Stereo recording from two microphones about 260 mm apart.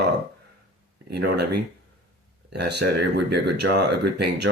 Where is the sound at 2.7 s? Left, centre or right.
Right.